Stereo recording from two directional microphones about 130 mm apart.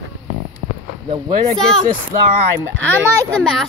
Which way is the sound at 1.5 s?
5° left (ahead or behind).